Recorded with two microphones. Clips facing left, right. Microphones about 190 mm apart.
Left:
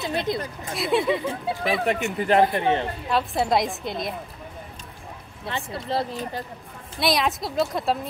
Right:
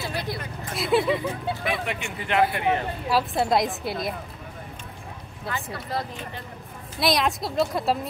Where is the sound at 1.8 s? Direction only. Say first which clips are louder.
Left 8 dB; 40° left (ahead or behind).